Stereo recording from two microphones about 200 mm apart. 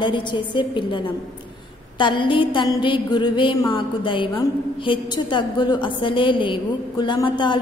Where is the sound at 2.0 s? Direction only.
25° left (ahead or behind).